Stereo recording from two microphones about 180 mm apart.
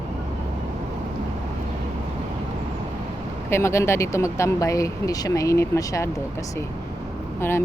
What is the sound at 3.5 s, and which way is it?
Speech, 15° left (ahead or behind).